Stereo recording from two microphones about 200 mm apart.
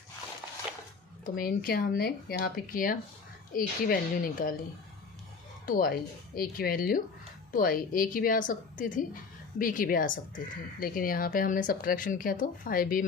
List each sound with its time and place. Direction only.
1.2 s speech: 45° left (ahead or behind)
5.6 s a woman's voice: 45° left (ahead or behind)